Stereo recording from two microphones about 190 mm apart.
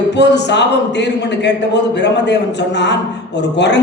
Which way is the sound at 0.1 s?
65° left (ahead or behind).